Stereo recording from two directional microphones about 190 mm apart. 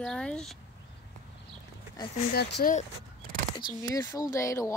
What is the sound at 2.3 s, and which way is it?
Speech, 55° left (ahead or behind).